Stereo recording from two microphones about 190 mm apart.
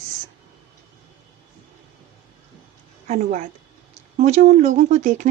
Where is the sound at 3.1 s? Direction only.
40° right (ahead or behind).